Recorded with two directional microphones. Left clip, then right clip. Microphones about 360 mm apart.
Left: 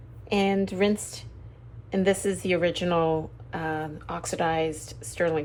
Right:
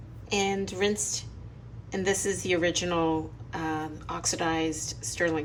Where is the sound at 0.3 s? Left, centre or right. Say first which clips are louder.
Left 3 dB; centre.